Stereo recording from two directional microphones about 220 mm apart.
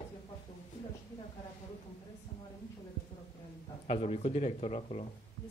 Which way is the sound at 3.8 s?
30° left (ahead or behind).